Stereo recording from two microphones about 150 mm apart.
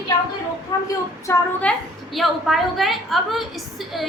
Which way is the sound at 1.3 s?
20° left (ahead or behind).